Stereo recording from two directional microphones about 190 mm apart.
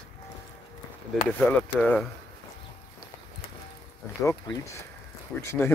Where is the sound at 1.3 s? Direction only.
10° left (ahead or behind).